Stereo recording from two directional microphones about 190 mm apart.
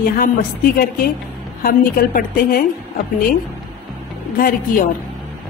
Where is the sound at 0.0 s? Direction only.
50° left (ahead or behind).